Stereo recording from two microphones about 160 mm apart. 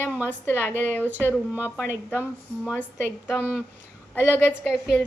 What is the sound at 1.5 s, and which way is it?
Speech, 10° right (ahead or behind).